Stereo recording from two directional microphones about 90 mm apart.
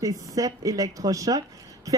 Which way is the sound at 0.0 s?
40° right (ahead or behind).